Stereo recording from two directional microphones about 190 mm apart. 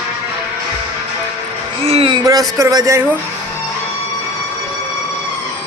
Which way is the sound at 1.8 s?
30° right (ahead or behind).